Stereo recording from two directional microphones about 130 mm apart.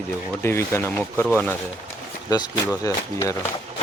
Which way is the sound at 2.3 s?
30° left (ahead or behind).